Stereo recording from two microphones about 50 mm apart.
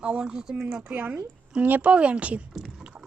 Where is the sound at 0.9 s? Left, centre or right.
Right.